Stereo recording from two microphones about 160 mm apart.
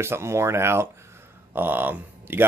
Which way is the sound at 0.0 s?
15° right (ahead or behind).